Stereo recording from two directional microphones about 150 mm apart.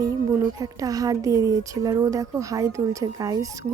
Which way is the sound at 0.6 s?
25° right (ahead or behind).